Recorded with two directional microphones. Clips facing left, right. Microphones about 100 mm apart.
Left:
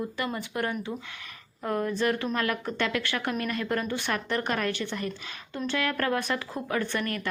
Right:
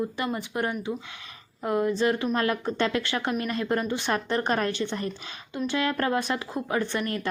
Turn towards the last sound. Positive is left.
turn(degrees=-25)  # may be behind; listen again after turning